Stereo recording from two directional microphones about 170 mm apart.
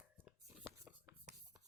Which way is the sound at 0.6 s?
10° right (ahead or behind).